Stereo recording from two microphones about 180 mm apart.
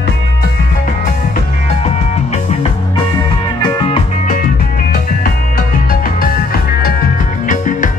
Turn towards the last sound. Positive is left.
turn(degrees=45)  # may be behind; listen again after turning